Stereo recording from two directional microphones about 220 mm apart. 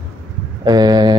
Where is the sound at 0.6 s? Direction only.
20° right (ahead or behind).